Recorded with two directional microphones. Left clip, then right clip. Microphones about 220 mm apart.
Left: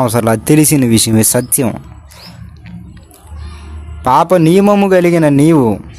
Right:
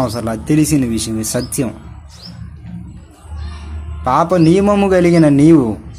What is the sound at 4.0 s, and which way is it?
A man's voice, 45° left (ahead or behind).